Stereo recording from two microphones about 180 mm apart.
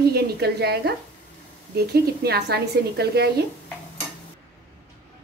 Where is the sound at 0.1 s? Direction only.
65° right (ahead or behind).